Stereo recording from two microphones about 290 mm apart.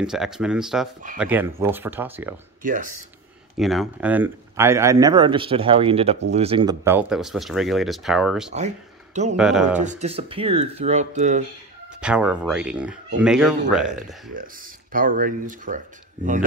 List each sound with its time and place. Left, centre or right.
0.0 s speech: centre
2.6 s speech: right
3.5 s speech: centre
8.5 s speech: right
9.4 s speech: centre
9.8 s speech: right
12.0 s speech: centre
14.3 s speech: right